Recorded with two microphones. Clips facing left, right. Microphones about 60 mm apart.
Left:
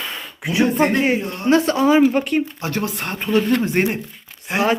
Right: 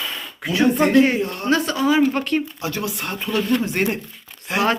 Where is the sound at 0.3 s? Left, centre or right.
Centre.